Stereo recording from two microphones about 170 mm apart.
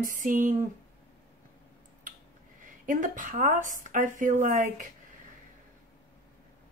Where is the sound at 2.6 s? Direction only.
50° right (ahead or behind).